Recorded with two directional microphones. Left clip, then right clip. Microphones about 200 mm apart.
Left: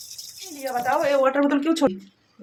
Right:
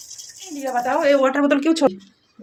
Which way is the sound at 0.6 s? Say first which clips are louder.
Right 3 dB; 50° right (ahead or behind).